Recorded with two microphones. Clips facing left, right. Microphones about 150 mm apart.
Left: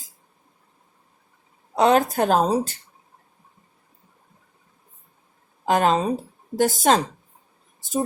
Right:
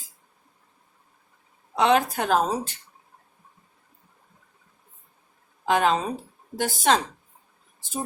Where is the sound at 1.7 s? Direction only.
40° left (ahead or behind).